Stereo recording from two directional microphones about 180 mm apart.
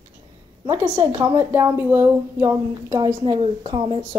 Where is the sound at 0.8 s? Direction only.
10° right (ahead or behind).